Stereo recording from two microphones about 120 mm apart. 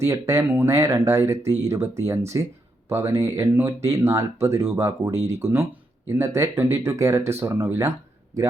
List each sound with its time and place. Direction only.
0.0 s speech: 25° right (ahead or behind)